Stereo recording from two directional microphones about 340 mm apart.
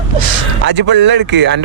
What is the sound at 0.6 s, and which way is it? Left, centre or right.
Speech, right.